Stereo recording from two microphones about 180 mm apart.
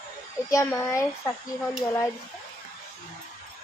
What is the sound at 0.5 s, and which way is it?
A child's voice, 15° left (ahead or behind).